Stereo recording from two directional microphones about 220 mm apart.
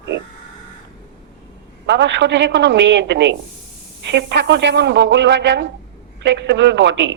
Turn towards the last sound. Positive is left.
turn(degrees=-55)  # may be behind; listen again after turning